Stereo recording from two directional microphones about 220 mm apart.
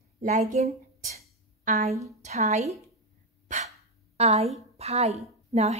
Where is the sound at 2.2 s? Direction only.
30° right (ahead or behind).